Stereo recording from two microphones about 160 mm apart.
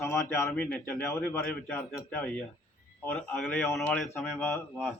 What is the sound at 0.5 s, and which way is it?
A man's voice, 5° left (ahead or behind).